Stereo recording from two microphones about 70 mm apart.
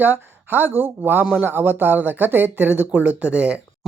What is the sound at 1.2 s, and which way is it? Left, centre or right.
Speech, centre.